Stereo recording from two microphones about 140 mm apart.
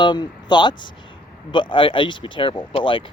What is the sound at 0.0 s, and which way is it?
Speech, 30° left (ahead or behind).